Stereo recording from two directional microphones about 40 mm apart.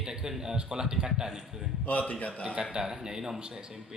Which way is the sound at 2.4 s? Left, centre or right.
Right.